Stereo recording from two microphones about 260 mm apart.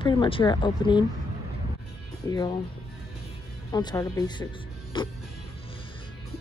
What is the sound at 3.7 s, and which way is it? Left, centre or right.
Speech, centre.